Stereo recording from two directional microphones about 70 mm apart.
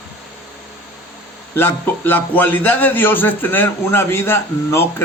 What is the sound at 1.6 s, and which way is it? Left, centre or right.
A man's voice, left.